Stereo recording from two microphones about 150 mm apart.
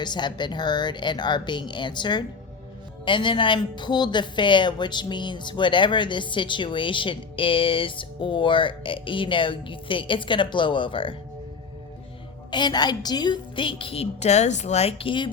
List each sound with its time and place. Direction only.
0.0 s a woman's voice: 30° left (ahead or behind)
12.5 s a woman's voice: 30° left (ahead or behind)